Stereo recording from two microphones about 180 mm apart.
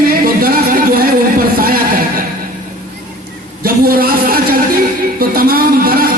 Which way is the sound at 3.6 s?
55° right (ahead or behind).